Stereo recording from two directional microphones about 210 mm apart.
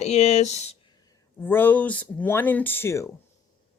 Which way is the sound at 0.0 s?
30° left (ahead or behind).